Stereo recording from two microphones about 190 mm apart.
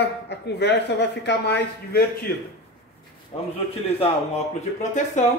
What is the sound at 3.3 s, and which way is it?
Speech, 30° left (ahead or behind).